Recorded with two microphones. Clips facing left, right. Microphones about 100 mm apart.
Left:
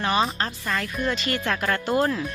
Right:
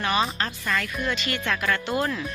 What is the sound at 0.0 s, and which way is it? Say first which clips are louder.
Speech: left 1 dB; 30° left (ahead or behind).